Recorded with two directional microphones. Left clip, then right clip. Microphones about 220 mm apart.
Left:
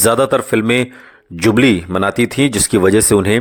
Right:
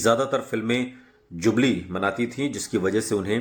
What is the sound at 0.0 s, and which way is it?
A man's voice, 45° left (ahead or behind).